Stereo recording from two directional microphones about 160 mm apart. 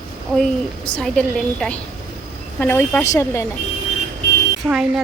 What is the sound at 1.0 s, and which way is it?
Speech, 5° left (ahead or behind).